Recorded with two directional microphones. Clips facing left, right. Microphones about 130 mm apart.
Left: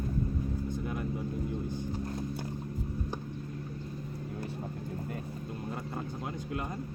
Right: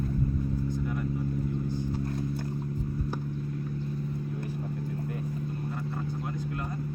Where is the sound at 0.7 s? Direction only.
20° left (ahead or behind).